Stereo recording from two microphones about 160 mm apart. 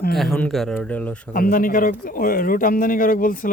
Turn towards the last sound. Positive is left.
turn(degrees=60)  # may be behind; listen again after turning